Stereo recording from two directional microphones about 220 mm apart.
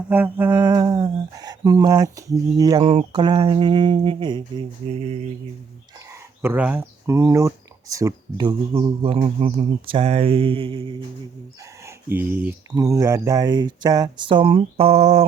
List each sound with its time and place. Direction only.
0.1 s speech: 10° right (ahead or behind)
6.1 s speech: 10° right (ahead or behind)
11.9 s speech: 10° right (ahead or behind); by 15.3 s 30° right (ahead or behind)